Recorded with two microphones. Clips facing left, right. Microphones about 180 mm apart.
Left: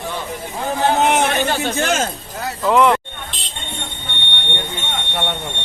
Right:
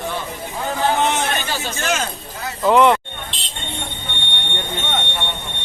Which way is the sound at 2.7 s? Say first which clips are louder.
Right 1 dB; centre (ahead or behind).